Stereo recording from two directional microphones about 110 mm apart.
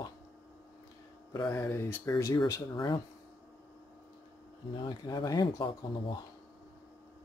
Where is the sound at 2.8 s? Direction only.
45° left (ahead or behind).